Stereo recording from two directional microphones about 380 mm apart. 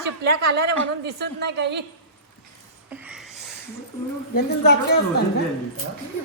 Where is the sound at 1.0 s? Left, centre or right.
Right.